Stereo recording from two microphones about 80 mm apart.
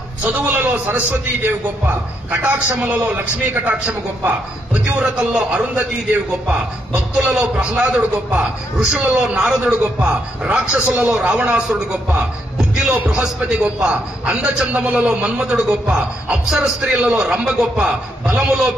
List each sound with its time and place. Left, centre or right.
0.2 s a man's voice: right
11.1 s a man's voice: centre